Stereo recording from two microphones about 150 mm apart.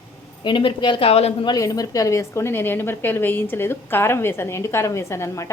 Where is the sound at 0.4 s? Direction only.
30° left (ahead or behind).